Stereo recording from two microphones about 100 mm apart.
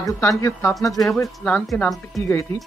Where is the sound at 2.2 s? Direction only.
30° left (ahead or behind).